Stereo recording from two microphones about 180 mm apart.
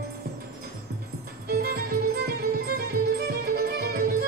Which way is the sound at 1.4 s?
60° right (ahead or behind).